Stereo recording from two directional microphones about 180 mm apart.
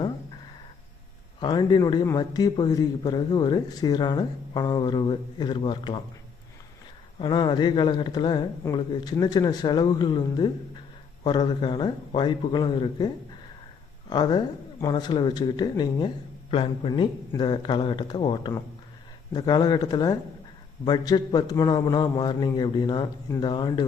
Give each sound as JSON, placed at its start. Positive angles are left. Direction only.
{"t": 1.4, "sound": "speech", "side_deg": 25}
{"t": 7.2, "sound": "speech", "side_deg": 25}
{"t": 14.1, "sound": "speech", "side_deg": 25}